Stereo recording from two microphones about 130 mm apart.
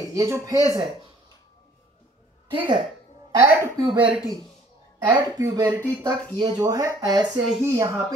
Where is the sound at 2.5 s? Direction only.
40° right (ahead or behind).